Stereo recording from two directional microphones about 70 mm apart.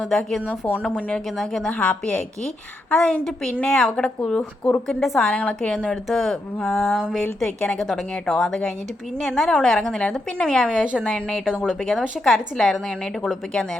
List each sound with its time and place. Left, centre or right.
0.3 s a woman's voice: centre
0.7 s a woman's voice: centre
1.4 s a woman's voice: centre
1.8 s a woman's voice: centre
4.9 s a woman's voice: centre
5.2 s a woman's voice: centre
6.6 s a woman's voice: centre
7.9 s a woman's voice: centre
11.4 s a woman's voice: centre